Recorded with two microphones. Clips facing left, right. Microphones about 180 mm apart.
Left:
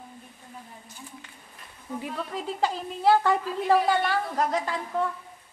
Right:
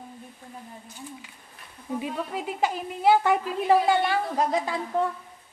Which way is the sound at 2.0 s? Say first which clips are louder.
Right 2 dB; 15° right (ahead or behind).